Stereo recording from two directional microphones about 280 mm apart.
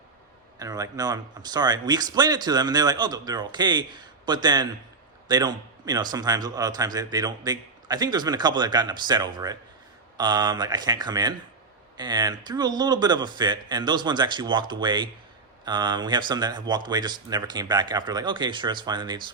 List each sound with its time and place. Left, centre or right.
0.6 s speech: centre